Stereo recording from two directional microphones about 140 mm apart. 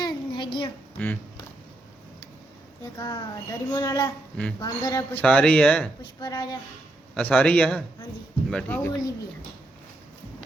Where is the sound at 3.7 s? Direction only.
25° left (ahead or behind).